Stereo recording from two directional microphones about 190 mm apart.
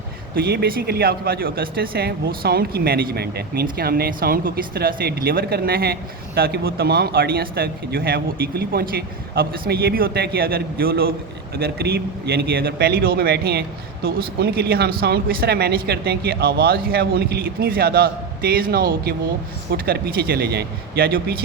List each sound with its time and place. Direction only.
0.3 s a man's voice: 55° right (ahead or behind)